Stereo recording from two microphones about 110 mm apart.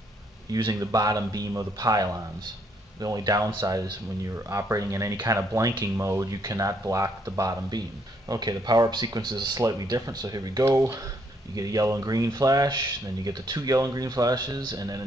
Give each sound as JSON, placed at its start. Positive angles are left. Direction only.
{"t": 0.5, "sound": "speech", "side_deg": -45}
{"t": 0.7, "sound": "speech", "side_deg": -35}